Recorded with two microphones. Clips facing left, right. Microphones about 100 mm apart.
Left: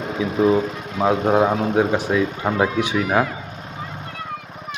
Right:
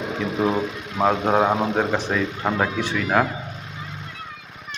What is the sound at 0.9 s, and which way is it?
Speech, centre (ahead or behind).